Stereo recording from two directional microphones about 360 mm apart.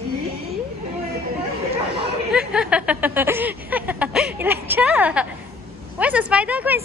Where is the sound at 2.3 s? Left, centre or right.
Centre.